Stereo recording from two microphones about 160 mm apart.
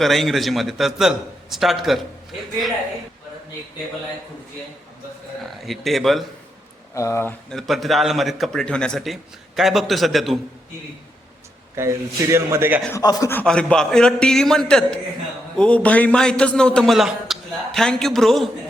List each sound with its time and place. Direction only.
0.0 s a man's voice: centre (ahead or behind)
5.4 s speech: centre (ahead or behind)
6.9 s speech: 20° left (ahead or behind)
7.5 s a man's voice: centre (ahead or behind)
11.8 s a man's voice: 15° right (ahead or behind)
12.9 s speech: 25° left (ahead or behind)
13.4 s a man's voice: 5° left (ahead or behind)